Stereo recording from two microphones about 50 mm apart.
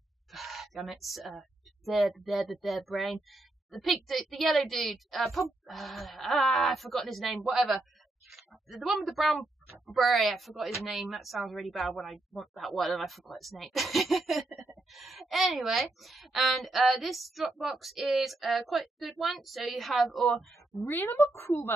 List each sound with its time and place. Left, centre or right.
0.3 s a sound: centre
1.9 s speech: centre
20.9 s a woman's voice: left
21.2 s a woman's voice: left